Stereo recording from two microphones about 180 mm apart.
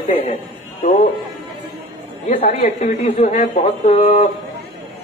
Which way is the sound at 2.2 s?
35° left (ahead or behind).